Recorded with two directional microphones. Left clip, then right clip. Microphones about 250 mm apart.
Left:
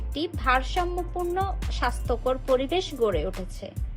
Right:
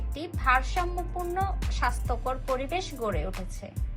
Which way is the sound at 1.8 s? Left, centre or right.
Left.